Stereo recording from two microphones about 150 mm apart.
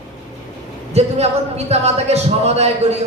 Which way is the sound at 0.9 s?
45° right (ahead or behind).